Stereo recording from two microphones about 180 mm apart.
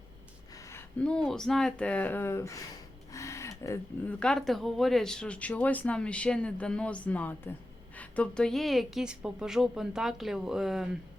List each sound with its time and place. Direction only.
0.5 s speech: 15° left (ahead or behind)
3.1 s a sound: 15° left (ahead or behind)
4.2 s a woman's voice: 5° left (ahead or behind)